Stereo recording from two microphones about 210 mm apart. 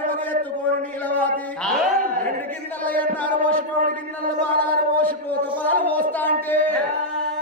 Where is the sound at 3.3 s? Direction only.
40° right (ahead or behind).